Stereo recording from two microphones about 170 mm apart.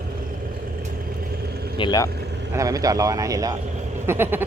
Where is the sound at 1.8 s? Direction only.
25° left (ahead or behind).